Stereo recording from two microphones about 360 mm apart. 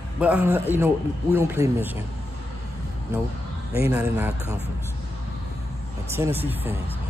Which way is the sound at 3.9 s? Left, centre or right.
Centre.